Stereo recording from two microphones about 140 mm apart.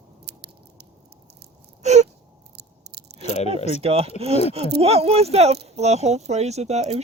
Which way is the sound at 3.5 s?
50° left (ahead or behind).